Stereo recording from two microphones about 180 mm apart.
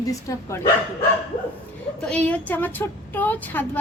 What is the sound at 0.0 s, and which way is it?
Speech, 20° left (ahead or behind).